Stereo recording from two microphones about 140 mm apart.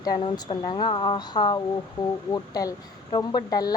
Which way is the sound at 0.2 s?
35° left (ahead or behind).